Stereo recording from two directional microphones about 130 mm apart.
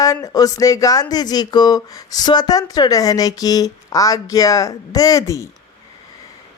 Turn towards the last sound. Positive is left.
turn(degrees=25)  # may be behind; listen again after turning